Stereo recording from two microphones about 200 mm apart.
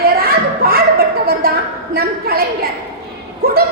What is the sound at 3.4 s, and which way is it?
Speech, 45° right (ahead or behind).